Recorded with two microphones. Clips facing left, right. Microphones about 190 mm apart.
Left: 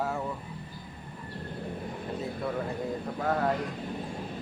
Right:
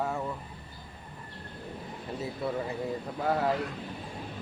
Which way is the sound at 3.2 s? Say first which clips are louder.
Even; 10° right (ahead or behind).